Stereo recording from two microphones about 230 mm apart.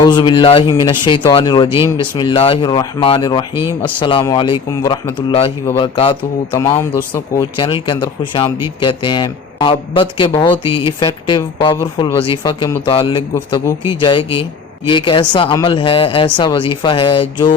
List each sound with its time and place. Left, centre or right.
0.0 s speech: centre
3.5 s speech: centre
4.2 s speech: centre